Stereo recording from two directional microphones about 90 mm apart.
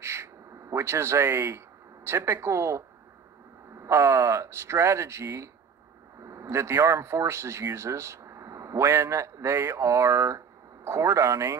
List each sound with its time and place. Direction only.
0.0 s gasp: 30° right (ahead or behind)
2.0 s speech: 30° right (ahead or behind)
3.8 s speech: 30° right (ahead or behind)